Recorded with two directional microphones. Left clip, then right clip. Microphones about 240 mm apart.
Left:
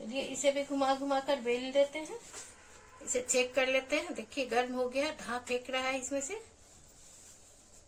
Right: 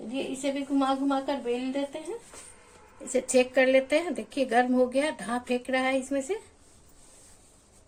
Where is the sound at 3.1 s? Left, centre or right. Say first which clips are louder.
Right 7 dB; right.